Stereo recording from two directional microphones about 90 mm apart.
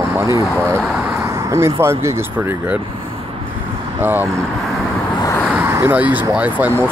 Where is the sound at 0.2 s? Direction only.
35° right (ahead or behind).